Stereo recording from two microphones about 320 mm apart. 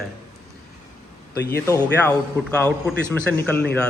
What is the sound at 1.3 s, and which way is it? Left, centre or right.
A man's voice, centre.